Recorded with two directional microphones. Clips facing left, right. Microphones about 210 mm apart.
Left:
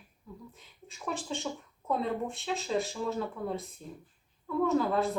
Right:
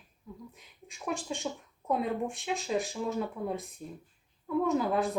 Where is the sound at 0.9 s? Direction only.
15° right (ahead or behind).